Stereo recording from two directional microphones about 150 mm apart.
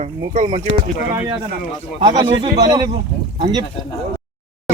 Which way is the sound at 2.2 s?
30° right (ahead or behind).